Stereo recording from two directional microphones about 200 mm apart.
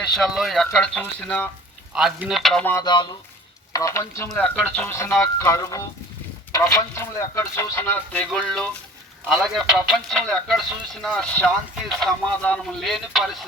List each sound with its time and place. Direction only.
0.1 s speech: centre (ahead or behind)
1.9 s speech: 5° right (ahead or behind)
2.8 s speech: 25° left (ahead or behind)
4.3 s speech: centre (ahead or behind)
4.9 s speech: 15° left (ahead or behind)